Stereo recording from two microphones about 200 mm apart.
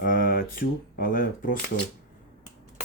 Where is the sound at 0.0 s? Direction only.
45° left (ahead or behind).